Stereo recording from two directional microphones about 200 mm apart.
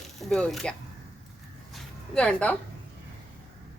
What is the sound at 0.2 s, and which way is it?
Speech, centre (ahead or behind).